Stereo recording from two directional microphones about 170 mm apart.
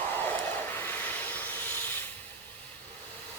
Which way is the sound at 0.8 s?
10° left (ahead or behind).